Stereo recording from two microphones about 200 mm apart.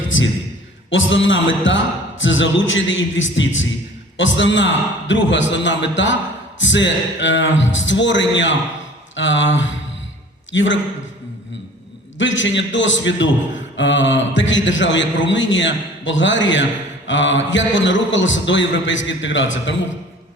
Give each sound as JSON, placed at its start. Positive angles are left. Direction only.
{"t": 0.9, "sound": "a man's voice", "side_deg": 70}
{"t": 12.2, "sound": "a man's voice", "side_deg": 70}